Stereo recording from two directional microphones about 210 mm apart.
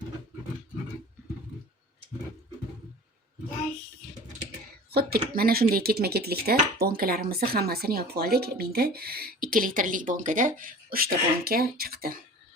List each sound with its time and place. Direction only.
4.9 s speech: 45° right (ahead or behind)